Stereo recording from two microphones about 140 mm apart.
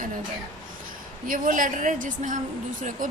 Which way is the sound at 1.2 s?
80° right.